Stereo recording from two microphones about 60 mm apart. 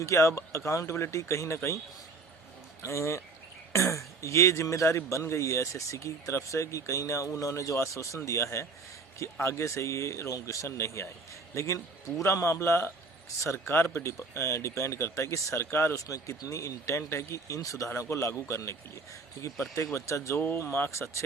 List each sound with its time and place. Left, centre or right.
0.0 s a man's voice: left
2.8 s a man's voice: left
16.0 s a man's voice: left